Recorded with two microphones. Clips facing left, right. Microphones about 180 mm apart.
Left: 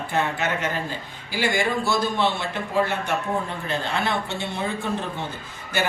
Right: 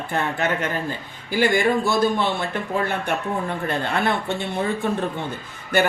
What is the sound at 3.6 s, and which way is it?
Speech, 55° right (ahead or behind).